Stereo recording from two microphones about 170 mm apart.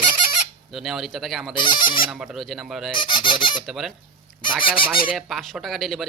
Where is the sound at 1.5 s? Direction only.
25° left (ahead or behind).